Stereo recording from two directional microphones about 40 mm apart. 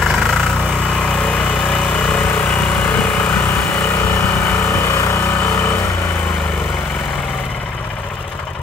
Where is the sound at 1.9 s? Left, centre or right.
Left.